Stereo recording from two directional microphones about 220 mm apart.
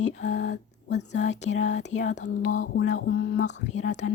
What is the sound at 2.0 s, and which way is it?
Speech, 35° left (ahead or behind).